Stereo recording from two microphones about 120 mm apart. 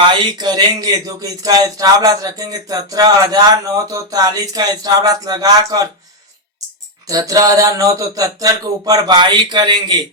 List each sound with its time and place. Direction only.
0.1 s speech: 40° right (ahead or behind)
7.1 s speech: 30° right (ahead or behind)